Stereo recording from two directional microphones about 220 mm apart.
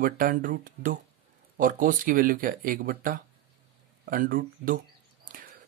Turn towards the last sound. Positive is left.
turn(degrees=-40)  # may be behind; listen again after turning